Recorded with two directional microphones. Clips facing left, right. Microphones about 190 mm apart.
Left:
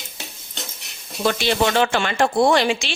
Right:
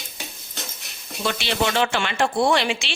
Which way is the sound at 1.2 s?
45° left (ahead or behind).